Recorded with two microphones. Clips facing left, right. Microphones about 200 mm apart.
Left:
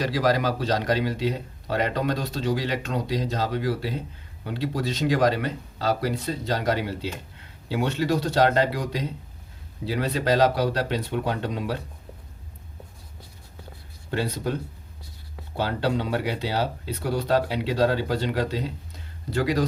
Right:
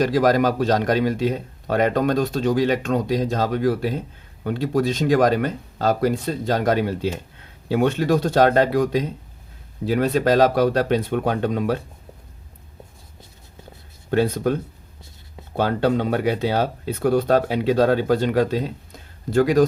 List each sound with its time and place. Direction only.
0.0 s speech: 50° right (ahead or behind)
14.1 s speech: 55° right (ahead or behind)
15.5 s speech: 55° right (ahead or behind)